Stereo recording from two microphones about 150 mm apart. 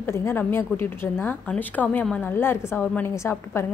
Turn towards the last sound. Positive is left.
turn(degrees=15)  # may be behind; listen again after turning